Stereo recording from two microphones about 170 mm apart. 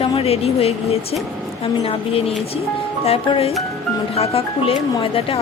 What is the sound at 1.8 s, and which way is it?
Speech, 35° left (ahead or behind).